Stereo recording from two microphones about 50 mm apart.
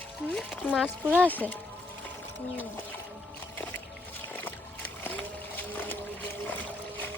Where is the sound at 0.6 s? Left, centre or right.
Left.